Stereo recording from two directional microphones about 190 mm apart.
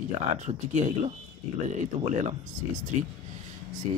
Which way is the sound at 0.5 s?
40° right (ahead or behind).